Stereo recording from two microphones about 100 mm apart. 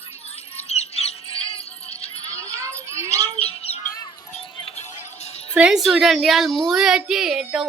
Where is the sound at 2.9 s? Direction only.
30° right (ahead or behind).